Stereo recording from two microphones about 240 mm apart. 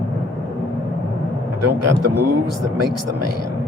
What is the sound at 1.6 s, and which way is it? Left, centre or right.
Speech, right.